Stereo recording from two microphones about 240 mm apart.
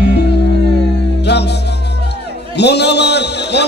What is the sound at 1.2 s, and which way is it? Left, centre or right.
Music, left.